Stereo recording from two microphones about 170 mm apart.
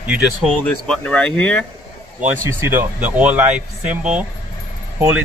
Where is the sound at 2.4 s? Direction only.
15° right (ahead or behind).